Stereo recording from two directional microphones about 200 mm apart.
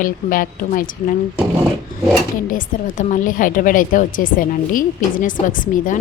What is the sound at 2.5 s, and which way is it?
A woman's voice, 40° left (ahead or behind).